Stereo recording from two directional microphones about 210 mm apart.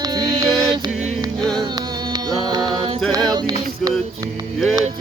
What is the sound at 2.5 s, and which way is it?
Mantra, 20° right (ahead or behind).